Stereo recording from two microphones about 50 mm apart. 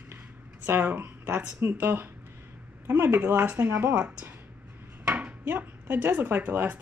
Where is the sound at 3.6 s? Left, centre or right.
Right.